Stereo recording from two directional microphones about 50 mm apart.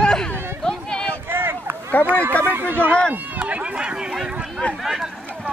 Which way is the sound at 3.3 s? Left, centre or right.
Right.